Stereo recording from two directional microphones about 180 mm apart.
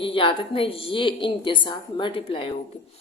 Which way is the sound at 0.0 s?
30° left (ahead or behind).